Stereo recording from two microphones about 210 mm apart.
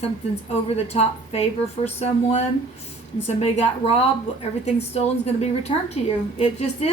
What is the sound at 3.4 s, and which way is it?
A woman's voice, 30° left (ahead or behind).